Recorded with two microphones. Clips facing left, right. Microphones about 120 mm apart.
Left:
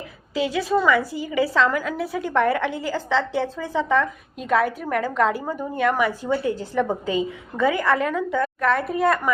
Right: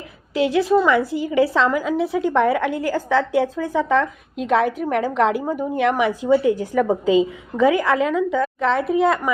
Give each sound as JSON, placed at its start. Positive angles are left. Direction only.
{"t": 0.3, "sound": "a woman's voice", "side_deg": -20}